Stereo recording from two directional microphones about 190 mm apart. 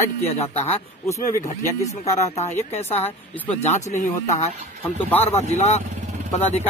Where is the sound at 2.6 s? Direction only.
35° left (ahead or behind).